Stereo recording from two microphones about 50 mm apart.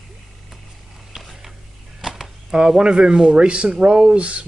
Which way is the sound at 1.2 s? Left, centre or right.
Centre.